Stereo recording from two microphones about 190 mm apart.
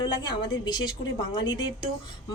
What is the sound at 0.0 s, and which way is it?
A woman's voice, 20° left (ahead or behind).